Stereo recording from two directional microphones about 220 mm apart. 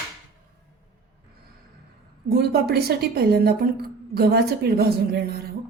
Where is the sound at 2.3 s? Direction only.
45° right (ahead or behind).